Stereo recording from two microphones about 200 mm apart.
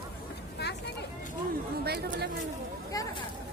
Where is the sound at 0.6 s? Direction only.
55° left (ahead or behind).